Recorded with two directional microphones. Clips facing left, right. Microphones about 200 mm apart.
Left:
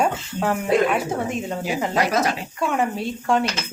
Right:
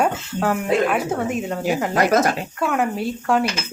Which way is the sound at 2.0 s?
50° right (ahead or behind).